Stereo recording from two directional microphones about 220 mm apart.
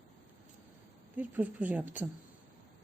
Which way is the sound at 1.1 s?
10° right (ahead or behind).